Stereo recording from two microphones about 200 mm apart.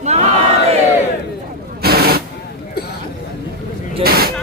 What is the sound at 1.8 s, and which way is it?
Vehicle, 50° right (ahead or behind).